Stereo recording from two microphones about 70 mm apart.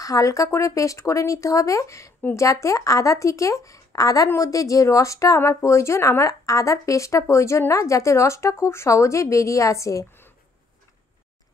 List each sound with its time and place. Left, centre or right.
0.0 s speech: left